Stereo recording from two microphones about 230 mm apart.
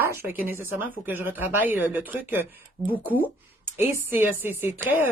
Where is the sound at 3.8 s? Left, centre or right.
Centre.